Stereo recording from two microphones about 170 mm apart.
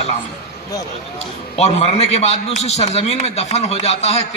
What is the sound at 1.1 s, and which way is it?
A man's voice, 35° left (ahead or behind).